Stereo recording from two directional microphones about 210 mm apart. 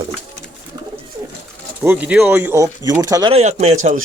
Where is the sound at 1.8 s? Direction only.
10° right (ahead or behind).